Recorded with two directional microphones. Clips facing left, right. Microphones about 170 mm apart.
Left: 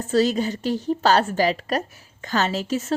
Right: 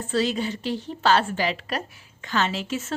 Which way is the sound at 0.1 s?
40° left (ahead or behind).